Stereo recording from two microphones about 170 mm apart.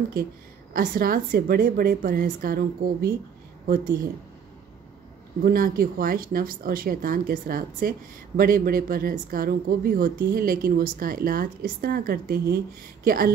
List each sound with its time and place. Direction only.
0.7 s a woman's voice: 60° right (ahead or behind)
5.4 s a woman's voice: 55° right (ahead or behind)